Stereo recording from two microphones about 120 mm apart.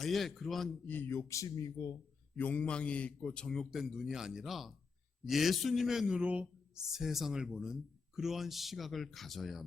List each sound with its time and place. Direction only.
0.0 s speech: centre (ahead or behind)
0.9 s speech: 15° left (ahead or behind)
1.3 s speech: 30° left (ahead or behind)
2.3 s speech: 10° left (ahead or behind)